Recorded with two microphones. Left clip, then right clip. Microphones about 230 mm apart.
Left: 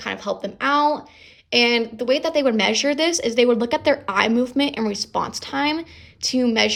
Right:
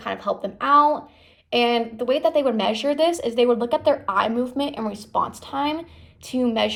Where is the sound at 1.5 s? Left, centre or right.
Left.